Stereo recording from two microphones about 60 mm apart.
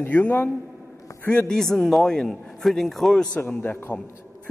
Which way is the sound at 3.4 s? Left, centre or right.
Left.